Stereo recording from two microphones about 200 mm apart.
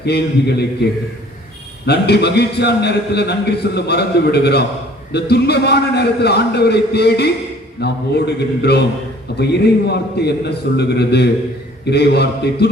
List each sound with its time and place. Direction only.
0.0 s a man's voice: 55° left (ahead or behind)
1.9 s a man's voice: 55° left (ahead or behind)